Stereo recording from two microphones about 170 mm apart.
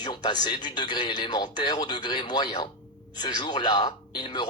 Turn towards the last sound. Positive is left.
turn(degrees=25)  # may be behind; listen again after turning